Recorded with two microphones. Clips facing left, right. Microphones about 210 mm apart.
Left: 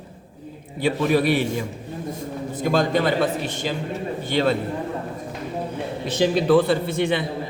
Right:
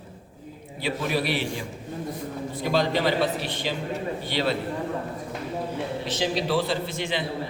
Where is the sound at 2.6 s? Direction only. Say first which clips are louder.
Left 3 dB; 50° left (ahead or behind).